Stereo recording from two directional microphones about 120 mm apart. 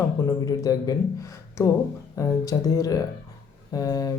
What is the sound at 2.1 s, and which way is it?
A woman's voice, 30° left (ahead or behind).